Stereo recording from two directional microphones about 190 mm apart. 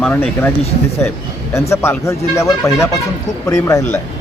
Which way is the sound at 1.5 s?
15° left (ahead or behind).